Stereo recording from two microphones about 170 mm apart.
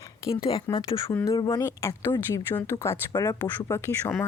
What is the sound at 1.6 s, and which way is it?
Speech, 15° left (ahead or behind).